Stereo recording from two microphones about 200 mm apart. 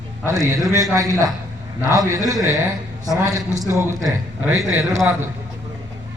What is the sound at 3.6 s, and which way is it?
A man's voice, 15° right (ahead or behind).